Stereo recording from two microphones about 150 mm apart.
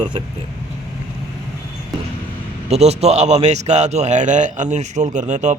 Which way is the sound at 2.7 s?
45° right (ahead or behind).